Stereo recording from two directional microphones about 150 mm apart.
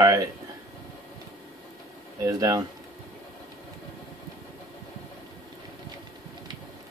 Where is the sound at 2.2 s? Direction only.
25° right (ahead or behind).